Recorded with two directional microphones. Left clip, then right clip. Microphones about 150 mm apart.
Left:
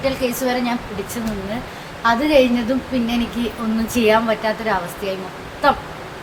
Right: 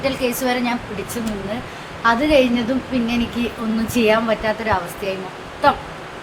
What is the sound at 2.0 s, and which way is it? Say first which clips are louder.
A woman's voice: even; 10° right (ahead or behind).